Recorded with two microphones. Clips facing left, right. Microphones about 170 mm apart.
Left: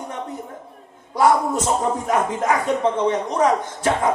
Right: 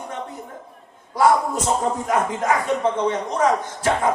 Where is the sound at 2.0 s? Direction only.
25° left (ahead or behind).